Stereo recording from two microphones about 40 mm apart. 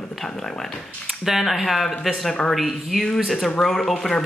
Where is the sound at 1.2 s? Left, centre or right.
Centre.